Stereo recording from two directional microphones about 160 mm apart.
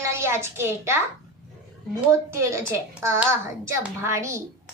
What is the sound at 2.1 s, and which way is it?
A woman's voice, 20° right (ahead or behind).